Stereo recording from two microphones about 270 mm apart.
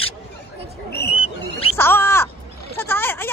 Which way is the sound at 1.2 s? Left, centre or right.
Left.